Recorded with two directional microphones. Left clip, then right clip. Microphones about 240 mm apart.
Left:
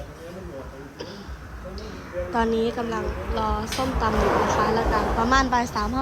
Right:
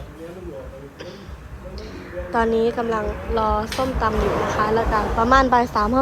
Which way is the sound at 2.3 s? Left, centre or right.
Centre.